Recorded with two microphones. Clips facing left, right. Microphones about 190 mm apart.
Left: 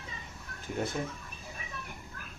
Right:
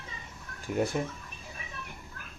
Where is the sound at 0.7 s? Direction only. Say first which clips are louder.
Right 5 dB; 60° right (ahead or behind).